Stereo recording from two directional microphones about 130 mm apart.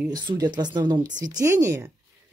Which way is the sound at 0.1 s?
35° right (ahead or behind).